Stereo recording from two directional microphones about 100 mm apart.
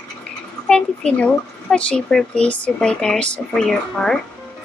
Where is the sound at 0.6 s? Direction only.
10° left (ahead or behind).